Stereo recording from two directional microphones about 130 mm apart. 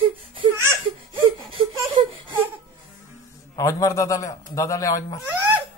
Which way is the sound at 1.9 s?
35° right (ahead or behind).